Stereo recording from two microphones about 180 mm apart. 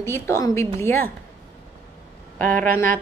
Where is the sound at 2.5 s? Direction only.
10° left (ahead or behind).